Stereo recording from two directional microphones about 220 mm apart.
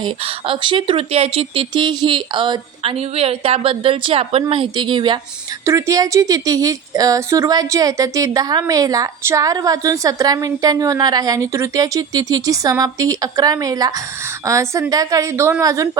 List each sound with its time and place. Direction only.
0.0 s a woman's voice: 25° right (ahead or behind)